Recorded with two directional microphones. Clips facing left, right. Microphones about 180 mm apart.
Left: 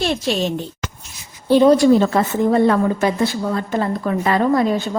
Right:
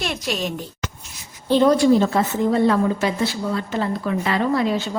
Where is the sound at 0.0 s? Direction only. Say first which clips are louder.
Left 6 dB; 30° left (ahead or behind).